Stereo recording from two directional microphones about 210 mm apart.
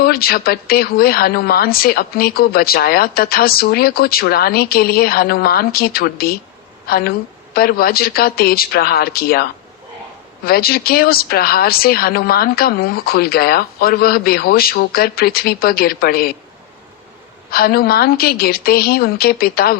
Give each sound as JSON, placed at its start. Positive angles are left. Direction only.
{"t": 0.0, "sound": "a woman's voice", "side_deg": 45}
{"t": 17.5, "sound": "speech", "side_deg": 45}